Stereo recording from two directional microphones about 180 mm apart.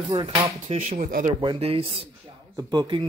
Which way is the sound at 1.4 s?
30° right (ahead or behind).